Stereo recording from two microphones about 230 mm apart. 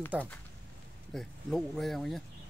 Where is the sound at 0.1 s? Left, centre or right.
Centre.